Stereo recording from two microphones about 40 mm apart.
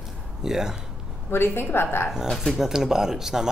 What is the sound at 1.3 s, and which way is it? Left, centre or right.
Speech, left.